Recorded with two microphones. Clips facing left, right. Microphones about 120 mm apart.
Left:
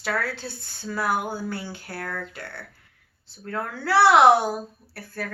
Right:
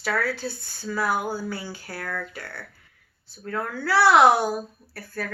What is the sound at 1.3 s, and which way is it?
Speech, 55° left (ahead or behind).